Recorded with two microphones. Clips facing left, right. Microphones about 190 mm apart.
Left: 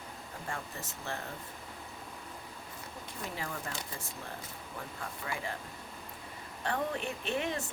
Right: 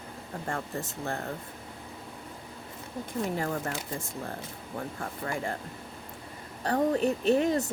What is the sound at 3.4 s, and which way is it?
Speech, 50° right (ahead or behind).